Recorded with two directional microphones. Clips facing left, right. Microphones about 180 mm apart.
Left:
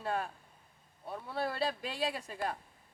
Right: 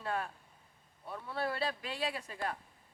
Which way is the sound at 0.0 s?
35° left (ahead or behind).